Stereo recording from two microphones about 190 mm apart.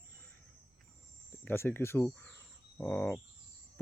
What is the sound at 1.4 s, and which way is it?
Speech, 10° left (ahead or behind).